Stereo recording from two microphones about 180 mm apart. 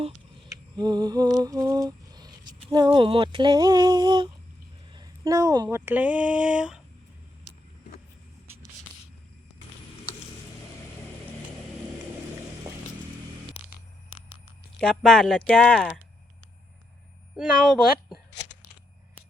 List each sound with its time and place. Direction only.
0.4 s lullaby: 20° right (ahead or behind)
2.7 s a sound: 25° right (ahead or behind)
5.6 s speech: 10° right (ahead or behind)
14.8 s speech: centre (ahead or behind)
17.3 s speech: centre (ahead or behind)